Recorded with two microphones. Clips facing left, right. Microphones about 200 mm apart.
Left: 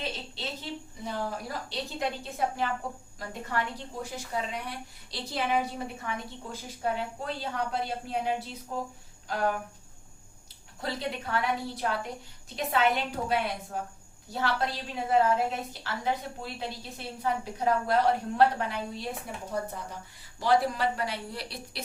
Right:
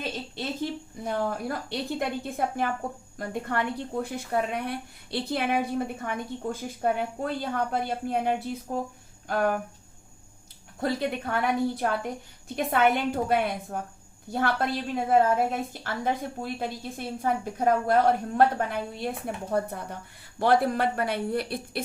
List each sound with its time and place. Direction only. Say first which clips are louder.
0.0 s a woman's voice: right 4 dB; 50° right (ahead or behind)
10.8 s a woman's voice: right 6 dB; 50° right (ahead or behind)